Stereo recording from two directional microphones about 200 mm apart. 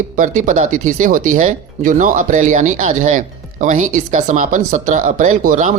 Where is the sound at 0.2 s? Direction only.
40° right (ahead or behind).